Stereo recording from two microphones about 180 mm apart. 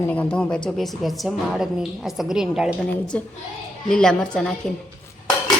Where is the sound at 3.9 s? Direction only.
5° left (ahead or behind).